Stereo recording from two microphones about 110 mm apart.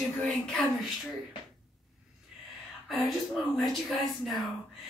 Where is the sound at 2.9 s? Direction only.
Centre (ahead or behind).